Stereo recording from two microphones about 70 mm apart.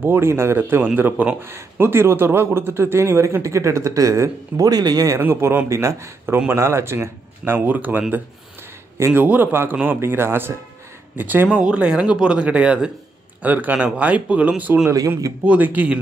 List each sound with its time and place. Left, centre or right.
0.0 s speech: right
4.6 s speech: right
5.2 s speech: right
5.7 s speech: right
7.5 s speech: right
9.1 s speech: right
11.4 s speech: centre
14.9 s speech: right
15.4 s speech: right